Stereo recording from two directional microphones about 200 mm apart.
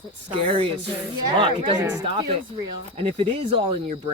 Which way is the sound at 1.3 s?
25° right (ahead or behind).